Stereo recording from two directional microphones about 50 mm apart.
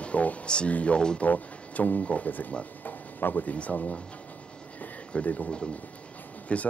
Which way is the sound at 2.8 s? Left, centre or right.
Left.